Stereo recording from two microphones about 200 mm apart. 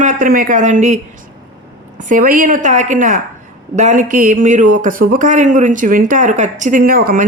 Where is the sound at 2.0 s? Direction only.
40° right (ahead or behind).